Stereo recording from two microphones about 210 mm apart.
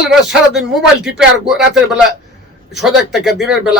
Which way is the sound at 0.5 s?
55° right (ahead or behind).